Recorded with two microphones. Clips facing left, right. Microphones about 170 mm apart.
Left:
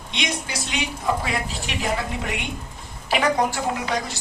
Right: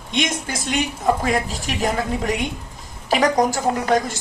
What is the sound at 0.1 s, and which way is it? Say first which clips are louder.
A woman's voice: right 5 dB; 45° right (ahead or behind).